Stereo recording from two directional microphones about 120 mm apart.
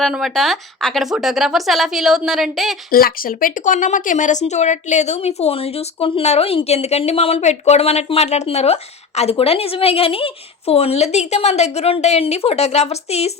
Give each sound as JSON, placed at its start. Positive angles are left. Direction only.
{"t": 0.0, "sound": "speech", "side_deg": 0}
{"t": 3.5, "sound": "a woman's voice", "side_deg": 90}